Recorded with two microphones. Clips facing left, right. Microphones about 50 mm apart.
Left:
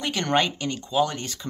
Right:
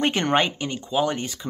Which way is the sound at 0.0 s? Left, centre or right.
Right.